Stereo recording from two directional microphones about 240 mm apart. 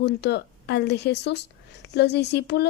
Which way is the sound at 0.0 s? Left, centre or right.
Left.